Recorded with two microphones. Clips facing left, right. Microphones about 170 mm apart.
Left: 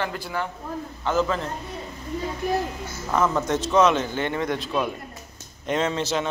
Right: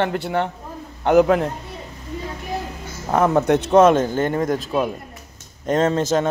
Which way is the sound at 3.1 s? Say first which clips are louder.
Right 6 dB; 60° right (ahead or behind).